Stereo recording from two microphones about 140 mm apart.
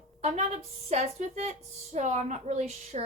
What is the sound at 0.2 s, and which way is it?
A woman's voice, 50° right (ahead or behind).